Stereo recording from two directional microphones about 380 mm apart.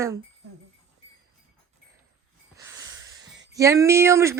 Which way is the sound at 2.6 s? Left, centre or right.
Centre.